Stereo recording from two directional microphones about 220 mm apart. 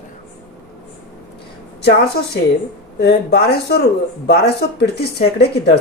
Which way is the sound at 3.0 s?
50° left (ahead or behind).